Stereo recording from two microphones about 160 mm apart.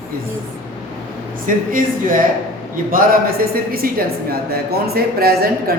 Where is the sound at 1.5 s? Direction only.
60° right (ahead or behind); by 5.7 s 75° right (ahead or behind).